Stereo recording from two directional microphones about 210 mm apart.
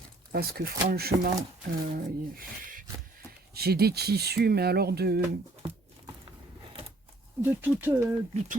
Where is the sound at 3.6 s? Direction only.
50° right (ahead or behind).